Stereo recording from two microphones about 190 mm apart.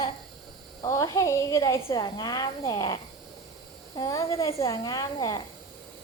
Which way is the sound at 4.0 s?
20° left (ahead or behind).